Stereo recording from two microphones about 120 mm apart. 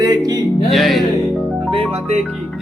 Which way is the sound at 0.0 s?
35° right (ahead or behind).